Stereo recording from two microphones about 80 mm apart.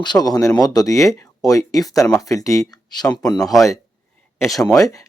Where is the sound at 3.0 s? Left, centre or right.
Left.